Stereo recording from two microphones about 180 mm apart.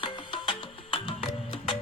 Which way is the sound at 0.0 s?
30° left (ahead or behind).